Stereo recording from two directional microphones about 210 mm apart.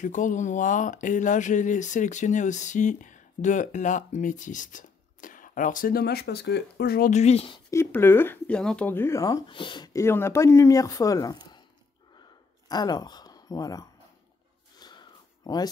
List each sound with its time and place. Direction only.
0.0 s speech: 35° left (ahead or behind)
7.7 s speech: 10° left (ahead or behind)
12.6 s speech: 20° left (ahead or behind)
14.8 s a sound: 20° left (ahead or behind)